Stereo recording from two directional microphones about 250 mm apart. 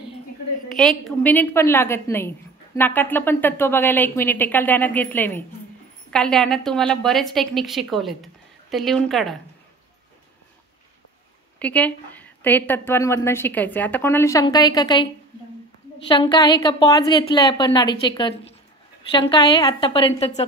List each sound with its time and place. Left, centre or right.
0.7 s a woman's voice: centre
11.6 s a woman's voice: centre
16.1 s a woman's voice: centre